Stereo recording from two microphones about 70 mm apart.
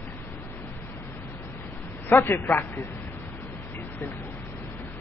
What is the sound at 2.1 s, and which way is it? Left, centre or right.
Speech, left.